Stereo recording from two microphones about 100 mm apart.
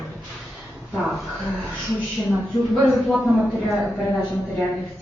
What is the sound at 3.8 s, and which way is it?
Speech, 15° left (ahead or behind).